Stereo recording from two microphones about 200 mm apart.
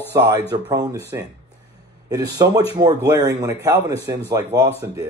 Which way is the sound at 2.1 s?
20° right (ahead or behind).